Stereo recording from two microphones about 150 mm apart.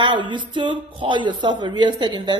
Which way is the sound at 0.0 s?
30° right (ahead or behind).